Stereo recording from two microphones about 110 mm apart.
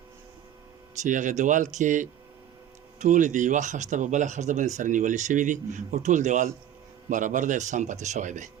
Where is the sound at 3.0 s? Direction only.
90° right.